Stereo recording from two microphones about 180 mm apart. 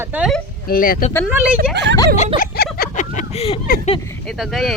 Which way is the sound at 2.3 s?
55° left (ahead or behind).